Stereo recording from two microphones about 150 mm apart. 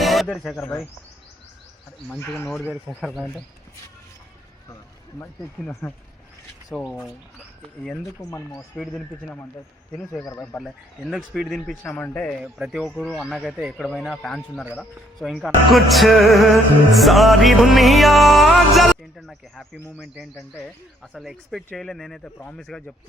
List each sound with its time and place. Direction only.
0.0 s speech: centre (ahead or behind)
3.0 s speech: centre (ahead or behind)
5.2 s speech: 15° left (ahead or behind)
6.7 s speech: 5° right (ahead or behind)
8.2 s speech: 20° left (ahead or behind)
8.7 s speech: 5° left (ahead or behind)
10.6 s speech: centre (ahead or behind)
11.7 s speech: 10° left (ahead or behind)
21.1 s speech: centre (ahead or behind)